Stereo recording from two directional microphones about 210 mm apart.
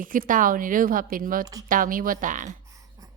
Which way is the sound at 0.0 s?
40° right (ahead or behind).